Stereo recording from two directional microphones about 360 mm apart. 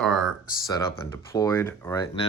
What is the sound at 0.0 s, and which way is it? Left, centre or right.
Speech, centre.